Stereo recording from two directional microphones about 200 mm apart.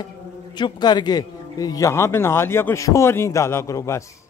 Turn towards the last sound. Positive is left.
turn(degrees=15)  # may be behind; listen again after turning